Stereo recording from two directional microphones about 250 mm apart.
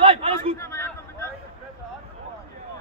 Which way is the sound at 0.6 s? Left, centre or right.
Centre.